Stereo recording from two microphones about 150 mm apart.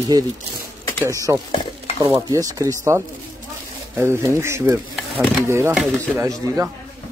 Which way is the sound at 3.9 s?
15° right (ahead or behind).